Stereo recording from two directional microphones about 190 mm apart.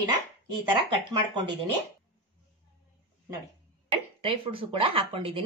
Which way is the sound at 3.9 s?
30° right (ahead or behind).